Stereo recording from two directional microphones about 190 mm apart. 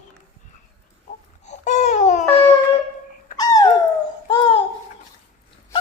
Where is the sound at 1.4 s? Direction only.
40° left (ahead or behind).